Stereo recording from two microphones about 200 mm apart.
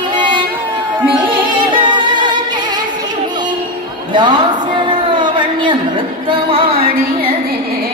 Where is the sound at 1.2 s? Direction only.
25° right (ahead or behind).